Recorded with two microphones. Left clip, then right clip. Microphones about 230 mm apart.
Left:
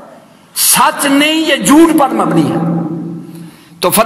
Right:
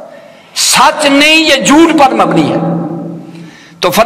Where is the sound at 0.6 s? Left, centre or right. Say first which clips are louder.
Right 4 dB; left.